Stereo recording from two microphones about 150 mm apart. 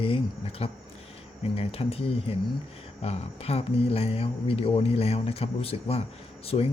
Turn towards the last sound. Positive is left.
turn(degrees=40)  # may be behind; listen again after turning